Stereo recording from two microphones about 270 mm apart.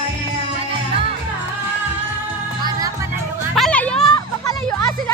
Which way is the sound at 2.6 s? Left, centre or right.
Centre.